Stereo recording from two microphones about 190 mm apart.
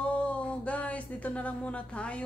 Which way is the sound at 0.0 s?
5° left (ahead or behind).